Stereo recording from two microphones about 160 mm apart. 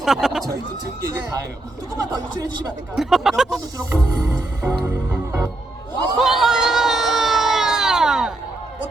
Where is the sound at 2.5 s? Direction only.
25° right (ahead or behind).